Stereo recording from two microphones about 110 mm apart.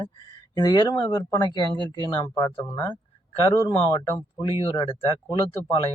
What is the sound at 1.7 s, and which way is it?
Speech, 40° right (ahead or behind).